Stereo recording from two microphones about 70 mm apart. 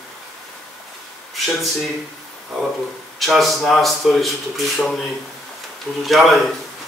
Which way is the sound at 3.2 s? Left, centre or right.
Centre.